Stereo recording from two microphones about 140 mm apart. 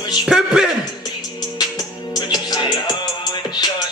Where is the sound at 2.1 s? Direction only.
30° left (ahead or behind).